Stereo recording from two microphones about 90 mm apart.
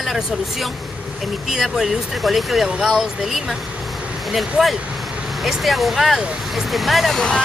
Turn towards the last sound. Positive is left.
turn(degrees=5)  # may be behind; listen again after turning